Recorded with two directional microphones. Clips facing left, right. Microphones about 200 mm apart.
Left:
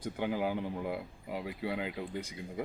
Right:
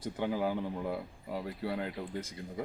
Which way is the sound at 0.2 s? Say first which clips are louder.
Right 1 dB; 5° left (ahead or behind).